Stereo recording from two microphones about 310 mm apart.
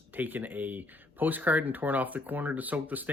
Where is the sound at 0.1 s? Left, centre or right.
Centre.